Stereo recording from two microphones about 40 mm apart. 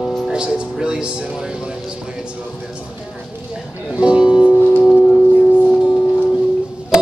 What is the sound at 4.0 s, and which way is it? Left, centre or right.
Music, right.